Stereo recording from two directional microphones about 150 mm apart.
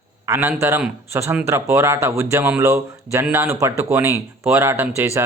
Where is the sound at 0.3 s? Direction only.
15° right (ahead or behind).